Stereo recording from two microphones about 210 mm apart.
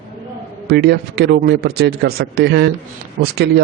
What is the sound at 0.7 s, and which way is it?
Speech, 50° right (ahead or behind).